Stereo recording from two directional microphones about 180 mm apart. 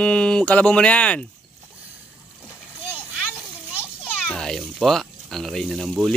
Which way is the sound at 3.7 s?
10° left (ahead or behind).